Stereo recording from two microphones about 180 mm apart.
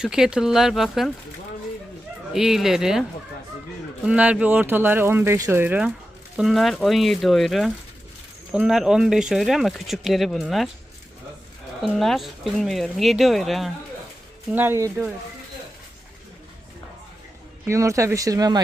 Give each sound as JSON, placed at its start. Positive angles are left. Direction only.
{"t": 0.0, "sound": "speech", "side_deg": -5}
{"t": 2.3, "sound": "speech", "side_deg": 0}
{"t": 11.8, "sound": "speech", "side_deg": 0}
{"t": 14.5, "sound": "speech", "side_deg": -10}
{"t": 17.7, "sound": "speech", "side_deg": -15}